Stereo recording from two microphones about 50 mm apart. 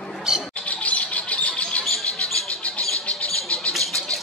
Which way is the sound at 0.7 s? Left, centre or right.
Left.